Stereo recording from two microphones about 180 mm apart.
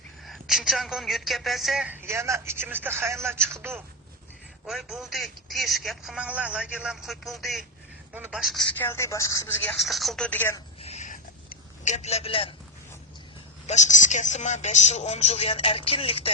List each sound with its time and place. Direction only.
0.3 s a woman's voice: centre (ahead or behind)
4.6 s speech: centre (ahead or behind)
8.8 s a woman's voice: 15° left (ahead or behind)
9.8 s speech: centre (ahead or behind)
10.8 s a sound: 35° left (ahead or behind)
13.7 s a woman's voice: 40° left (ahead or behind)